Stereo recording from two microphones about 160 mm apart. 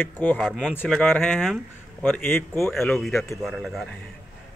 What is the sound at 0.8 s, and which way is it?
Speech, 10° left (ahead or behind).